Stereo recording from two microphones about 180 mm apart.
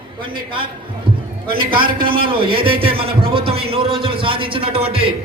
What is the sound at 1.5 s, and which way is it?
A man's voice, 30° right (ahead or behind).